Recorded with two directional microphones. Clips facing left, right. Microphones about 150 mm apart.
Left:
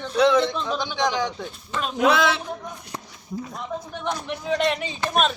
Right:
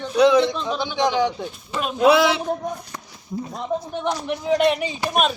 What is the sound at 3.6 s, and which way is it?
A man's voice, 20° right (ahead or behind).